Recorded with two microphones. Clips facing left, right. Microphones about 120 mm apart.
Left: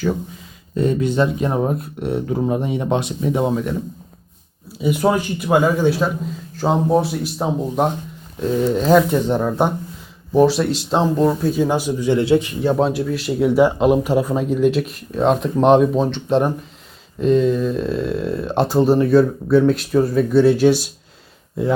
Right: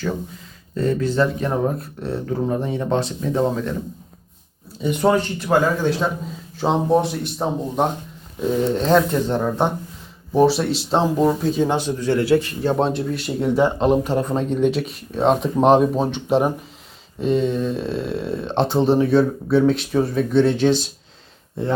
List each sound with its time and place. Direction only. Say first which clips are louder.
0.8 s speech: left 2 dB; 15° left (ahead or behind)
4.8 s speech: even; 5° left (ahead or behind)
10.3 s speech: left 2 dB; centre (ahead or behind); by 12.7 s 15° left (ahead or behind)
12.8 s speech: left 2 dB; centre (ahead or behind)